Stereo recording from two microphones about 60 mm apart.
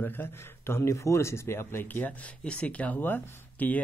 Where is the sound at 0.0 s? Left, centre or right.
Left.